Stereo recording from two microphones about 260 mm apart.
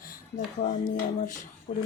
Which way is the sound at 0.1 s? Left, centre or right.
Left.